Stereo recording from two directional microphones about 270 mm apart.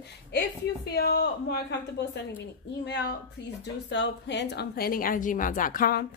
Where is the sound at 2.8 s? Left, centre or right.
Left.